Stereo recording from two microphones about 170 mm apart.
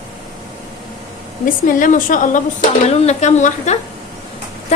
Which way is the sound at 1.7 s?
50° left (ahead or behind).